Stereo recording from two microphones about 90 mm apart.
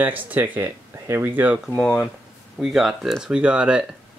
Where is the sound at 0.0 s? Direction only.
20° right (ahead or behind).